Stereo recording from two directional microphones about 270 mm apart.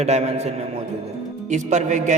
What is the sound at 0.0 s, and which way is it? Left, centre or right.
A man's voice, right.